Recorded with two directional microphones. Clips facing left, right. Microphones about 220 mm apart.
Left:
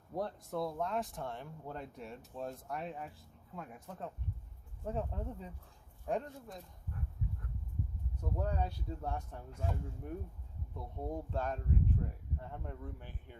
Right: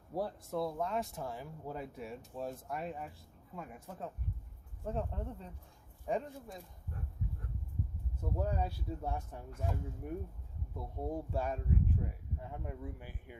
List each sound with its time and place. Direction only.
0.1 s speech: 5° right (ahead or behind)
8.2 s speech: 5° right (ahead or behind)